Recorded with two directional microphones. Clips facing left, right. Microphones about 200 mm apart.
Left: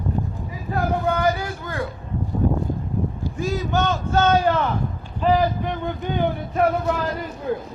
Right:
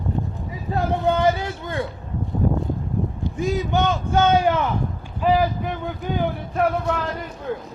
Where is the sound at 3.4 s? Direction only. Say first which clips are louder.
Right 1 dB; 15° right (ahead or behind); by 7.0 s centre (ahead or behind).